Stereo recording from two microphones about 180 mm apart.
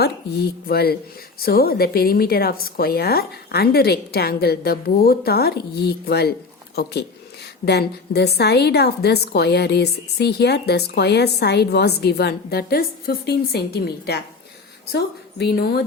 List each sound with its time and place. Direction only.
0.0 s a woman's voice: 60° left (ahead or behind)